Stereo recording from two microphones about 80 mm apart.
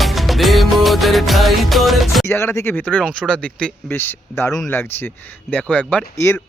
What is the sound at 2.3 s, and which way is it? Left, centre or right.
Speech, left.